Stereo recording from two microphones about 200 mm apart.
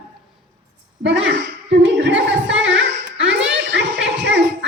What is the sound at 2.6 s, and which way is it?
Music, 65° right (ahead or behind).